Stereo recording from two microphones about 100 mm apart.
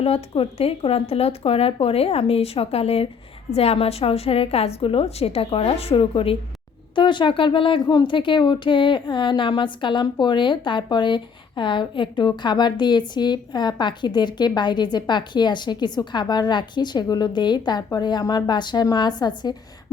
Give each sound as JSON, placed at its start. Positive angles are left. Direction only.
{"t": 0.0, "sound": "speech", "side_deg": 80}
{"t": 6.9, "sound": "a woman's voice", "side_deg": 50}